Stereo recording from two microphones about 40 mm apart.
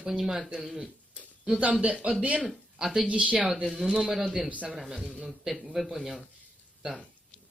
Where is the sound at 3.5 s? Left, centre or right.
Centre.